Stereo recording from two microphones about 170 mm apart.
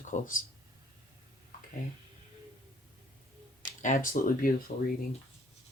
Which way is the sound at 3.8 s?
50° left (ahead or behind).